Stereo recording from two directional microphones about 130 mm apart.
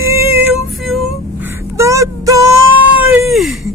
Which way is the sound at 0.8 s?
Centre (ahead or behind).